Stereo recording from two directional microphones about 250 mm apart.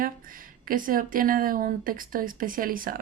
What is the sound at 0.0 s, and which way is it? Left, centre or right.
Speech, right.